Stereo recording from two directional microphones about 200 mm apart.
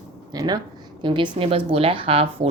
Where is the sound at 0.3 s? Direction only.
20° right (ahead or behind).